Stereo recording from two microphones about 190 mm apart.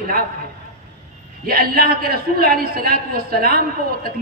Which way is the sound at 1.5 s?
50° right (ahead or behind).